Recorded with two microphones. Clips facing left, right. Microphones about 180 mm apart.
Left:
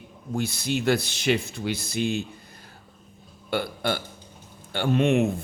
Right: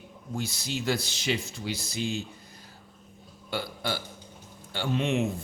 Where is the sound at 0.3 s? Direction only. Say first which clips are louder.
Left 6 dB; 60° left (ahead or behind).